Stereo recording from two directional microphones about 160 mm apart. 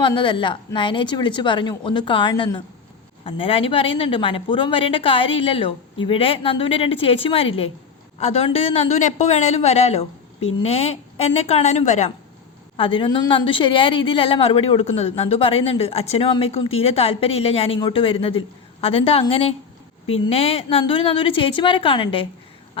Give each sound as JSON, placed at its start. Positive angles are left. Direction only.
{"t": 0.0, "sound": "a woman's voice", "side_deg": 30}
{"t": 12.7, "sound": "a woman's voice", "side_deg": 35}